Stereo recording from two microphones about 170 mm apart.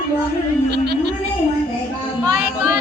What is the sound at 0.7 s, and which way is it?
Speech, 75° right (ahead or behind).